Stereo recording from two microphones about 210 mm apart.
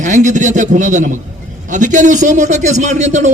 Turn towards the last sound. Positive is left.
turn(degrees=-35)  # may be behind; listen again after turning